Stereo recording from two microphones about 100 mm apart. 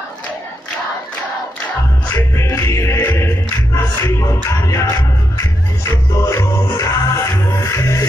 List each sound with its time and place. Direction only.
2.3 s music: 30° left (ahead or behind)